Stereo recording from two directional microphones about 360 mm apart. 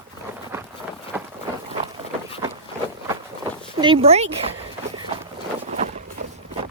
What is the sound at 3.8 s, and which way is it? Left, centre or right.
Speech, centre.